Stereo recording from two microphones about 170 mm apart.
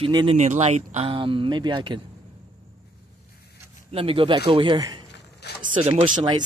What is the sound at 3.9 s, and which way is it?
Speech, 35° right (ahead or behind).